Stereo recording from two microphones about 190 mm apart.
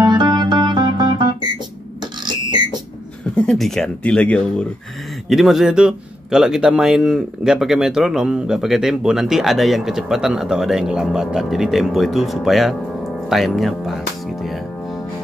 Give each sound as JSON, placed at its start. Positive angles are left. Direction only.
{"t": 0.0, "sound": "music", "side_deg": -20}
{"t": 3.3, "sound": "a man's voice", "side_deg": 5}